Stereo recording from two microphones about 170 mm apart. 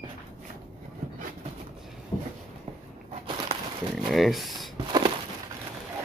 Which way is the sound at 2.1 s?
20° left (ahead or behind).